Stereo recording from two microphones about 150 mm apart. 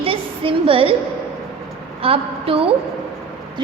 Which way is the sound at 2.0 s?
40° right (ahead or behind).